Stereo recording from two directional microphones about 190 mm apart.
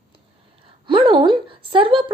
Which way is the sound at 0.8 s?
25° right (ahead or behind).